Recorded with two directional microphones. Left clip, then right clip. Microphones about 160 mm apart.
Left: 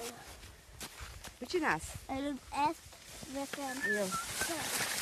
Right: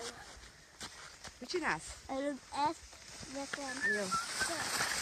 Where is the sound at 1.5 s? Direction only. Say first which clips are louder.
Left 3 dB; 45° left (ahead or behind); by 2.8 s 65° left (ahead or behind).